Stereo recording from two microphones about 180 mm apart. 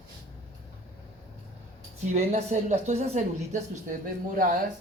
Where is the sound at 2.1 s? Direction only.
35° right (ahead or behind).